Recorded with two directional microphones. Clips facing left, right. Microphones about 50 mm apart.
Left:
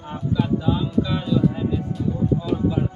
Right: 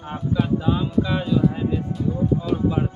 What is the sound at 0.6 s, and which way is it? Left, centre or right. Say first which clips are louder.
Speech: even; centre.